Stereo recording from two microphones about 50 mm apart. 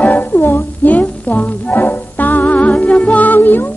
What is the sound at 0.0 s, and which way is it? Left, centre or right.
Music, left.